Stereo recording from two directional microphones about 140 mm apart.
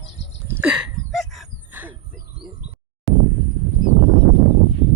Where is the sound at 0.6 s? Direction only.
10° right (ahead or behind).